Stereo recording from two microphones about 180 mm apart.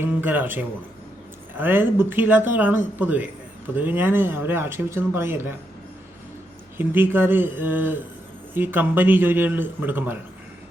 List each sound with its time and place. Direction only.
0.0 s speech: 10° right (ahead or behind)
6.7 s speech: 10° right (ahead or behind)